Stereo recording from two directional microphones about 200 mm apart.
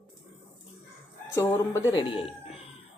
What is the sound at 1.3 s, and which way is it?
Speech, 15° left (ahead or behind).